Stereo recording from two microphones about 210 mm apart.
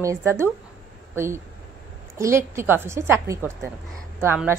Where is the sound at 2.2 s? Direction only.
15° right (ahead or behind).